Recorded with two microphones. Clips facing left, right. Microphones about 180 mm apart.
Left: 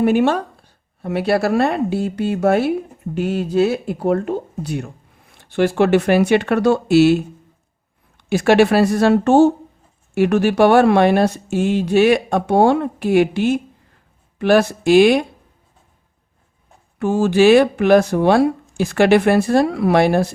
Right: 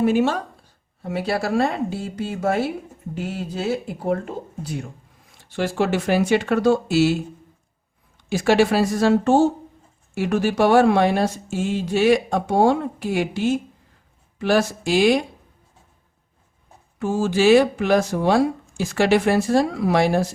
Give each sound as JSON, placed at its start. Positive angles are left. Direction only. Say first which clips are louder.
{"t": 0.0, "sound": "a woman's voice", "louder": "left 4 dB", "side_deg": 60}
{"t": 8.3, "sound": "a woman's voice", "louder": "left 4 dB", "side_deg": 60}
{"t": 17.0, "sound": "a woman's voice", "louder": "left 5 dB", "side_deg": 65}